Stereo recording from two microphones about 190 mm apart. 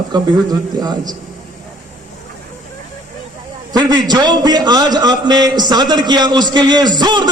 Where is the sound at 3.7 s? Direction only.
20° right (ahead or behind).